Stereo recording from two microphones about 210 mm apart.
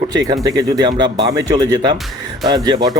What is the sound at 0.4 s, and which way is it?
Speech, 20° right (ahead or behind).